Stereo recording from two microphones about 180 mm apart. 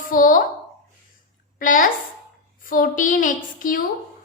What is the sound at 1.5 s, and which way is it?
A woman's voice, 50° left (ahead or behind).